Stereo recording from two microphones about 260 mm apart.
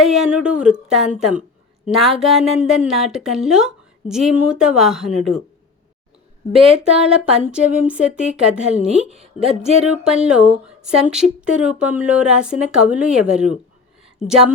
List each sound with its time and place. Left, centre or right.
0.0 s speech: centre
7.1 s speech: centre
8.9 s a woman's voice: right
9.5 s speech: centre